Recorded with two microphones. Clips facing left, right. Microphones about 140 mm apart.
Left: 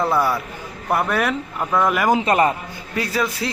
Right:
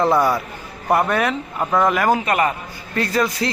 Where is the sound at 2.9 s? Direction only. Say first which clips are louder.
Right 3 dB; 10° left (ahead or behind).